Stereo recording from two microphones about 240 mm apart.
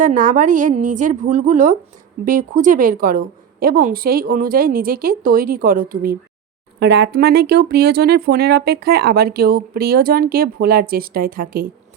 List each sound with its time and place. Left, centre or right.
0.0 s speech: right